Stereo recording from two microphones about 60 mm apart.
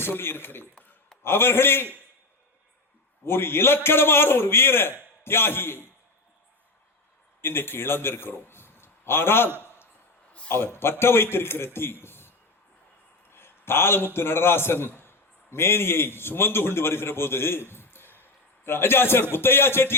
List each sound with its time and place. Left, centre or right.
0.0 s a man's voice: left
3.2 s a man's voice: left
7.4 s a man's voice: left
9.6 s a sound: left
10.5 s a man's voice: left
13.3 s a man's voice: left